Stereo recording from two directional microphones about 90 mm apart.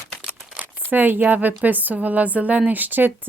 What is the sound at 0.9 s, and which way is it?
Speech, 20° right (ahead or behind).